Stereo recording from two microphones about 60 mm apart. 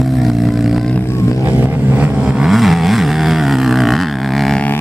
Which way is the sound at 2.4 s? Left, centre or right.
Centre.